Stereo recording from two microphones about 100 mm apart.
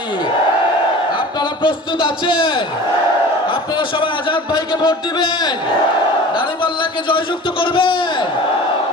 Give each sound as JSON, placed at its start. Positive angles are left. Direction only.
{"t": 1.4, "sound": "a man's voice", "side_deg": 55}
{"t": 7.6, "sound": "a man's voice", "side_deg": 60}